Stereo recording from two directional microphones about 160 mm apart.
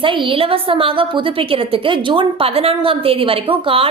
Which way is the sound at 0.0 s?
30° right (ahead or behind).